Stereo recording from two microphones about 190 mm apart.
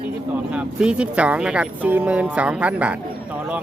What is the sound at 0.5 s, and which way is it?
Speech, 5° right (ahead or behind).